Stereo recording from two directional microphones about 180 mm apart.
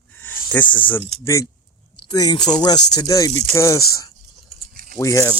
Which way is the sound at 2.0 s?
25° left (ahead or behind).